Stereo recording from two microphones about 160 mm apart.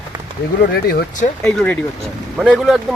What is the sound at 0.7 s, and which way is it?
Speech, 75° left (ahead or behind).